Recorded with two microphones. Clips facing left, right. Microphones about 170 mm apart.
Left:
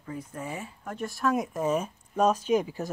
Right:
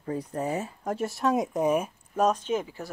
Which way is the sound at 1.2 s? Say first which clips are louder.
Right 2 dB; 20° right (ahead or behind).